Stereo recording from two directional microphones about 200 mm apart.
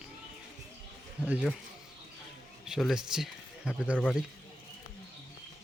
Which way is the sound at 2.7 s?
Centre (ahead or behind).